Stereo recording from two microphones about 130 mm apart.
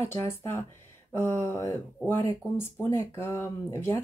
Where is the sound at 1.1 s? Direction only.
20° left (ahead or behind).